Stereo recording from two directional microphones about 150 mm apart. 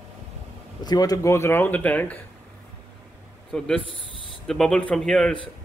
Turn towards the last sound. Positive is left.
turn(degrees=5)  # may be behind; listen again after turning